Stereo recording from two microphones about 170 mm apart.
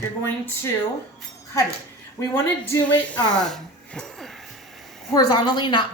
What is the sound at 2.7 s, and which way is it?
Speech, 10° left (ahead or behind).